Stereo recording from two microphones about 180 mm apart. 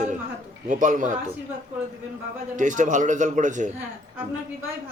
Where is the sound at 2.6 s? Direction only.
45° right (ahead or behind).